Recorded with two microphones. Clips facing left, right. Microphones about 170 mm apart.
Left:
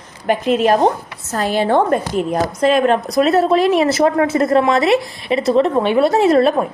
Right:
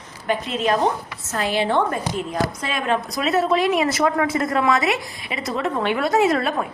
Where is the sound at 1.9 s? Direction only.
55° left (ahead or behind).